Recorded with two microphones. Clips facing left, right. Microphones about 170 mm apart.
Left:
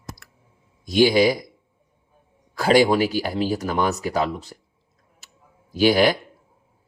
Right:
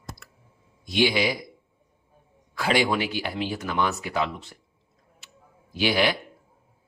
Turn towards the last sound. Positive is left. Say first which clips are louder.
# left 6 dB
turn(degrees=40)  # may be behind; listen again after turning